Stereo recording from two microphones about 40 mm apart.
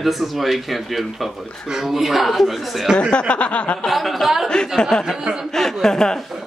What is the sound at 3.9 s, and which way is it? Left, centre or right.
Speech, centre.